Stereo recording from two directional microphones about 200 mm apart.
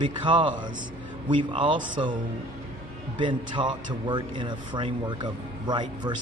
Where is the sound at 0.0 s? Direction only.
25° right (ahead or behind).